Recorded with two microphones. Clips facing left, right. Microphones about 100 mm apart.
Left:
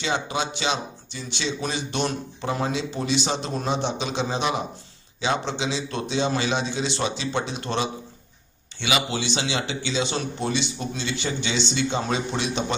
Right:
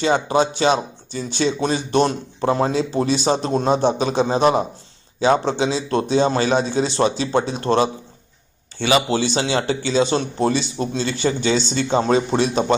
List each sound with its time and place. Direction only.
0.0 s speech: 40° right (ahead or behind)